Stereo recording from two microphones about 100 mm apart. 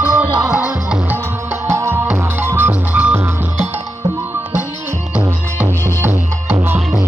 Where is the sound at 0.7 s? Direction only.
15° right (ahead or behind).